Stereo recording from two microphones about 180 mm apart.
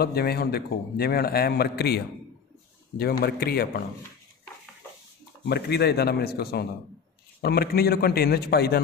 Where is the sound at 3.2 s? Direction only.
60° left (ahead or behind).